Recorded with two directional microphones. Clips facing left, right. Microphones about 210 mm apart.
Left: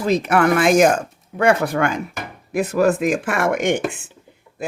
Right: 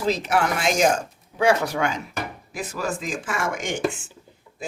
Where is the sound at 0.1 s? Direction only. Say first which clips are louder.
Left 7 dB; 55° left (ahead or behind).